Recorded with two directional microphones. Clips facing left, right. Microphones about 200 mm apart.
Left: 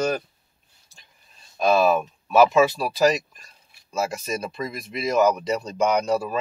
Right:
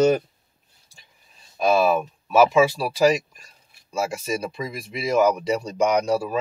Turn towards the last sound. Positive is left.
turn(degrees=-10)  # may be behind; listen again after turning